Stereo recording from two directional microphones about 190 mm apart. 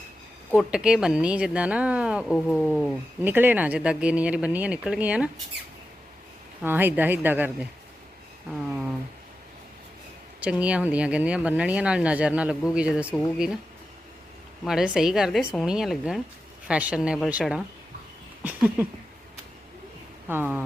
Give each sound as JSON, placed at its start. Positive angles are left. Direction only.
{"t": 0.5, "sound": "a woman's voice", "side_deg": -5}
{"t": 6.6, "sound": "speech", "side_deg": -10}
{"t": 10.4, "sound": "speech", "side_deg": -5}
{"t": 14.6, "sound": "a woman's voice", "side_deg": 0}
{"t": 20.2, "sound": "speech", "side_deg": -10}